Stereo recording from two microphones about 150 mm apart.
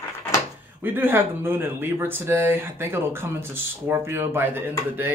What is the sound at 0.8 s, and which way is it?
Speech, 15° right (ahead or behind).